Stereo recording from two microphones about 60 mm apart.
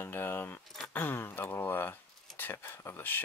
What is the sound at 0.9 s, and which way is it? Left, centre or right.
Speech, left.